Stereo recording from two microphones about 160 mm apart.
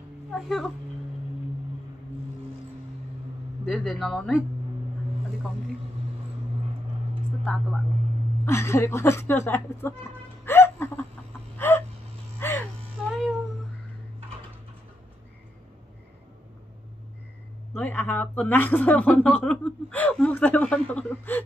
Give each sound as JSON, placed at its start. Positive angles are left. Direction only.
{"t": 0.3, "sound": "speech", "side_deg": 0}
{"t": 3.6, "sound": "speech", "side_deg": 0}
{"t": 8.5, "sound": "speech", "side_deg": 15}
{"t": 10.4, "sound": "hiccup", "side_deg": 15}
{"t": 11.5, "sound": "a sound", "side_deg": 15}
{"t": 12.4, "sound": "music", "side_deg": 15}
{"t": 13.0, "sound": "music", "side_deg": 0}
{"t": 17.7, "sound": "speech", "side_deg": 10}